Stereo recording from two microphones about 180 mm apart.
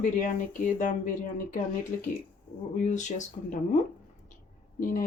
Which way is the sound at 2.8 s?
45° left (ahead or behind).